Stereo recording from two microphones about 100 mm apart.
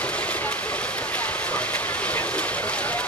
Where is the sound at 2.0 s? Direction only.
15° left (ahead or behind).